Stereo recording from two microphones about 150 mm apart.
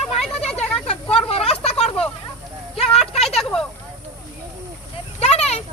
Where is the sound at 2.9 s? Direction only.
Centre (ahead or behind).